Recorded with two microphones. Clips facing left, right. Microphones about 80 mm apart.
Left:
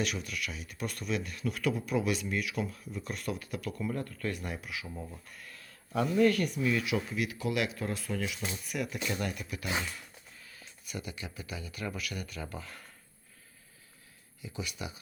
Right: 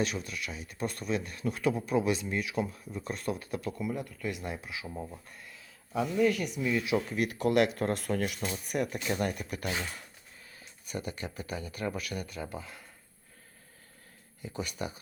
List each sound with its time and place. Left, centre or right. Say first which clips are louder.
0.0 s speech: right 2 dB; right
3.8 s speech: even; centre
5.5 s a sound: even; centre
6.5 s speech: even; centre
7.1 s speech: right 5 dB; right
10.5 s speech: right 3 dB; right; by 12.8 s centre
14.4 s speech: right 3 dB; right